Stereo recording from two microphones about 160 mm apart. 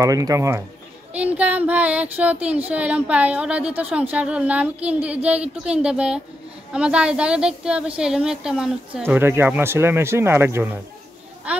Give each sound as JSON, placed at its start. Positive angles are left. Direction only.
{"t": 0.0, "sound": "a woman's voice", "side_deg": -20}